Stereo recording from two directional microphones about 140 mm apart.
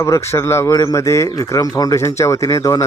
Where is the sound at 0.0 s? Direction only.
20° left (ahead or behind).